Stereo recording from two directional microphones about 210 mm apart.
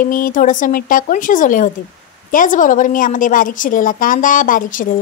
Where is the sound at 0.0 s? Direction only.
40° left (ahead or behind).